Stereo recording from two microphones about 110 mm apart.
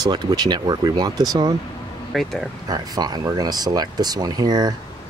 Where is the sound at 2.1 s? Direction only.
Centre (ahead or behind).